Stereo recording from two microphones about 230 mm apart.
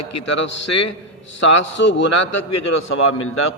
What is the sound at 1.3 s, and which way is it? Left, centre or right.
Speech, left.